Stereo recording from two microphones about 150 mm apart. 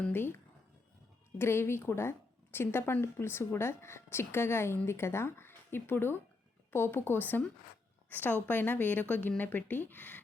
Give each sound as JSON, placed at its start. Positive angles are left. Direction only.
{"t": 0.0, "sound": "speech", "side_deg": 15}
{"t": 1.4, "sound": "speech", "side_deg": 15}